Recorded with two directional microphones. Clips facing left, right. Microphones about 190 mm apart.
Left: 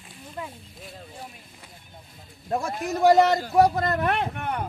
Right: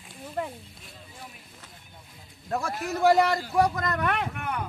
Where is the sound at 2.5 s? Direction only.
25° left (ahead or behind).